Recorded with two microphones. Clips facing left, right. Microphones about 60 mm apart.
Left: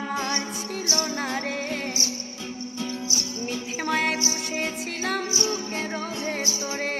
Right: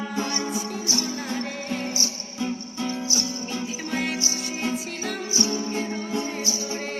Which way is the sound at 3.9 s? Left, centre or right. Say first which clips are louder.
Left 4 dB; left.